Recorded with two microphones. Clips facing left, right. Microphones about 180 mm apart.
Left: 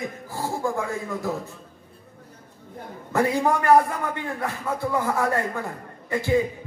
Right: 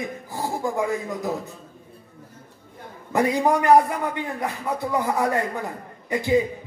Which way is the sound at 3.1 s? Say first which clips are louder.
Right 1 dB; 15° right (ahead or behind).